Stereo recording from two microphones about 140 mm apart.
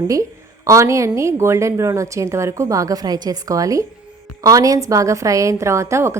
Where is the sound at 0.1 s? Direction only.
20° right (ahead or behind).